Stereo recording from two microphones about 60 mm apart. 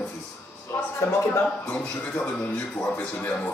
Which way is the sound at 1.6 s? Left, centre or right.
Left.